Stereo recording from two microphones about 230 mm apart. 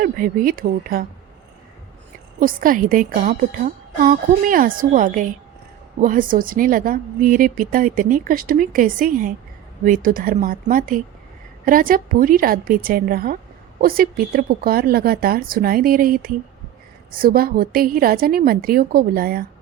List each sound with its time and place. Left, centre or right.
0.0 s a woman's voice: right
2.4 s a woman's voice: right